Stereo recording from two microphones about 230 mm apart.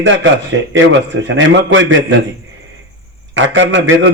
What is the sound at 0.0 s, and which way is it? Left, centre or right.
A man's voice, right.